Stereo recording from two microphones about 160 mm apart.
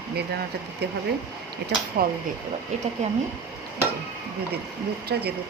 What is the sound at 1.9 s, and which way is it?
Speech, 65° right (ahead or behind).